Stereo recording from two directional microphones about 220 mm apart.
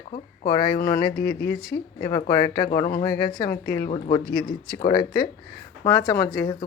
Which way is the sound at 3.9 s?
25° left (ahead or behind).